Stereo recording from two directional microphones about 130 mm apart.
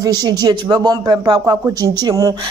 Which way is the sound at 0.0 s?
30° right (ahead or behind).